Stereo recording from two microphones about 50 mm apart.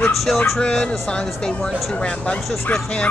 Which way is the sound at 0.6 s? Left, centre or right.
Centre.